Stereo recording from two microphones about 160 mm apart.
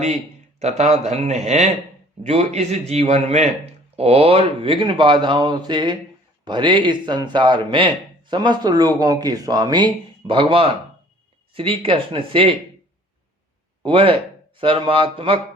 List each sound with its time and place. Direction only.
0.6 s a man's voice: 45° right (ahead or behind)
13.8 s speech: 35° right (ahead or behind)